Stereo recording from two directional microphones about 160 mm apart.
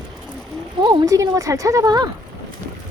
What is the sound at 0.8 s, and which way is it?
Speech, 30° right (ahead or behind).